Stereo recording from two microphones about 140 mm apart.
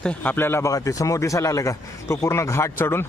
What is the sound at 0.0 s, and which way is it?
Speech, 10° left (ahead or behind).